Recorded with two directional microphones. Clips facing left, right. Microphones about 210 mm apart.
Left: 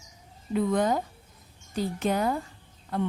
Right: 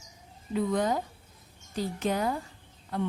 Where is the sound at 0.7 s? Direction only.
55° left (ahead or behind).